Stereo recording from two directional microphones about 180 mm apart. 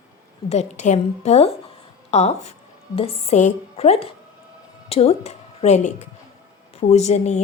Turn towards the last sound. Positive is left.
turn(degrees=40)  # may be behind; listen again after turning